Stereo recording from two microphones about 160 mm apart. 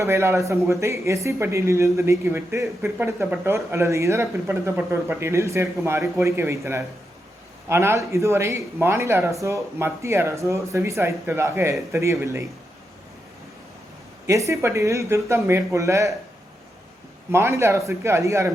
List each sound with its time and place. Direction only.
0.0 s speech: 15° right (ahead or behind)
14.3 s speech: 20° right (ahead or behind)
17.3 s speech: 15° right (ahead or behind)